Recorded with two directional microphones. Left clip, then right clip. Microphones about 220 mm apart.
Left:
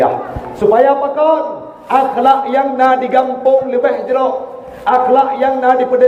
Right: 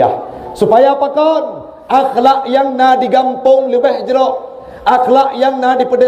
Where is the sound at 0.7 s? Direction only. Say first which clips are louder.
Right 2 dB; 45° right (ahead or behind).